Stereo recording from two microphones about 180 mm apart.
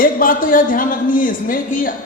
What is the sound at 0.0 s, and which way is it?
A woman's voice, 50° left (ahead or behind).